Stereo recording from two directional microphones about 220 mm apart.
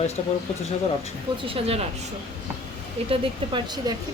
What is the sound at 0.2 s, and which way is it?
Speech, 30° left (ahead or behind).